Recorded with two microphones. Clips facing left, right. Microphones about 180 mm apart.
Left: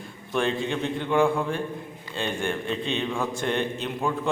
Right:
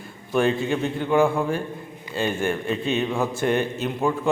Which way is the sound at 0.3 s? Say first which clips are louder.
Right 4 dB; 5° right (ahead or behind).